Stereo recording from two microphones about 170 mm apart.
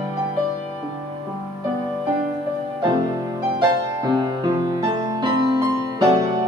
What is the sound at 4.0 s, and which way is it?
Music, 25° right (ahead or behind).